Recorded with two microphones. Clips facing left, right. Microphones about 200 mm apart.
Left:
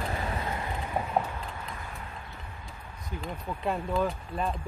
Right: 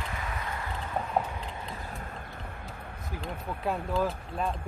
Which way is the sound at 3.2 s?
5° right (ahead or behind).